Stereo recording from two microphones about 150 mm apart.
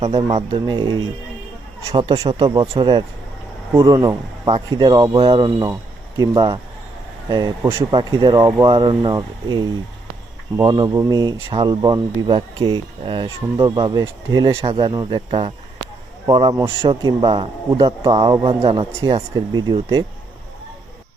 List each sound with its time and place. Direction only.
0.0 s speech: 35° right (ahead or behind)
7.9 s speech: 30° right (ahead or behind)
18.9 s speech: 20° right (ahead or behind)